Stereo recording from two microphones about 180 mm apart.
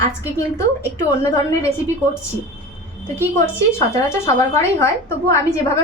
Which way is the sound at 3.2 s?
15° left (ahead or behind).